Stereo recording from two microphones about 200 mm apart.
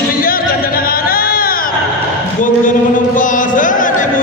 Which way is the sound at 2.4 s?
40° left (ahead or behind).